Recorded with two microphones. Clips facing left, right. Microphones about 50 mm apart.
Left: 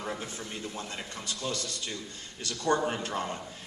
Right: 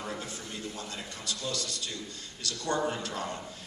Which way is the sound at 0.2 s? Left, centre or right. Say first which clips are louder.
Left 1 dB; left.